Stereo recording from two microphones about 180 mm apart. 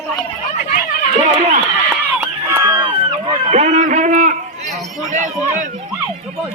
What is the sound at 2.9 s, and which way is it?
Run, 30° right (ahead or behind).